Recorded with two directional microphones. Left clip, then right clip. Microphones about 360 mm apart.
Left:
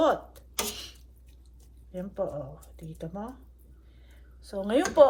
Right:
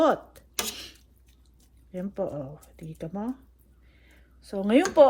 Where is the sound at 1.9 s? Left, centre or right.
Right.